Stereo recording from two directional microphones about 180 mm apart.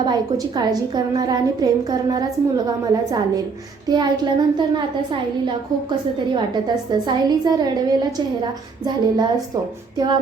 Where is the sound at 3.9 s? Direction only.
25° right (ahead or behind).